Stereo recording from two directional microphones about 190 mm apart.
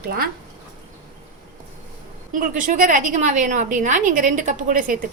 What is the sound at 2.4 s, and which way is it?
A woman's voice, 45° right (ahead or behind).